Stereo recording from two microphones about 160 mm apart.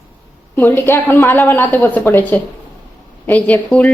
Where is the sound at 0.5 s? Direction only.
15° left (ahead or behind).